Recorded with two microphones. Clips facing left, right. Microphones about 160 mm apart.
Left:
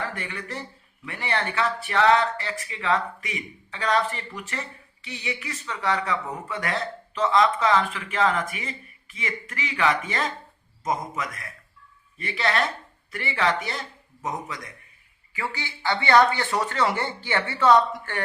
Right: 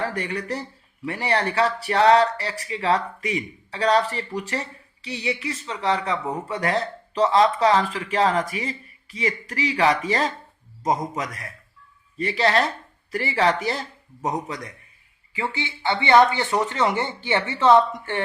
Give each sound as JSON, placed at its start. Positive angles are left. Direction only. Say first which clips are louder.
{"t": 0.0, "sound": "a man's voice", "louder": "right 6 dB", "side_deg": -35}